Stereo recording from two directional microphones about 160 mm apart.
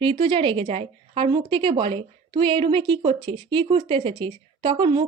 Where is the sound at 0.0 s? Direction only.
30° right (ahead or behind).